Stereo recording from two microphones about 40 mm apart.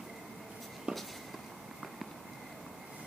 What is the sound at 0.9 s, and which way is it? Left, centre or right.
Writing, right.